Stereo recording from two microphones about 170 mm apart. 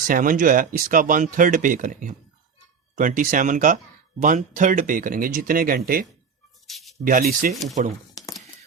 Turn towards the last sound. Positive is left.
turn(degrees=-45)  # may be behind; listen again after turning